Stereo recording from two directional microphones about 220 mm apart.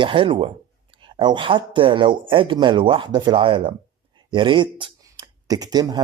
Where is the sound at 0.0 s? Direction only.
25° right (ahead or behind).